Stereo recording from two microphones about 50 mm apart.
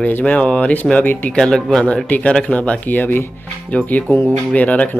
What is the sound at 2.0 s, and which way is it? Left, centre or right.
Speech, left.